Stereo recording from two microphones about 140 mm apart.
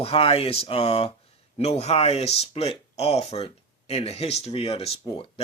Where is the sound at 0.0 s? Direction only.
45° left (ahead or behind).